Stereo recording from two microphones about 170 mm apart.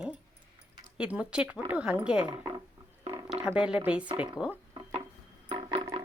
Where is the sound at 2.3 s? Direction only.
25° right (ahead or behind).